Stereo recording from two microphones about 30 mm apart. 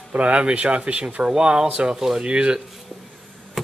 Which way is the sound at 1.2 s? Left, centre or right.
Right.